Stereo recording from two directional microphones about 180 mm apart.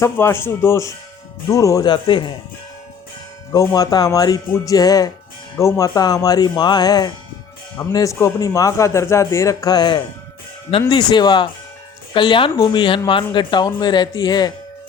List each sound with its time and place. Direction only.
0.0 s speech: 15° left (ahead or behind)
3.5 s speech: 20° left (ahead or behind)